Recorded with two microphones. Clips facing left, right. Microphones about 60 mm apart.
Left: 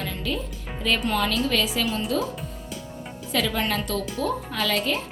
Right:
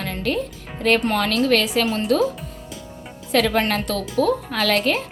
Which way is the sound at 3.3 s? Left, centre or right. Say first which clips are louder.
Right 6 dB; right.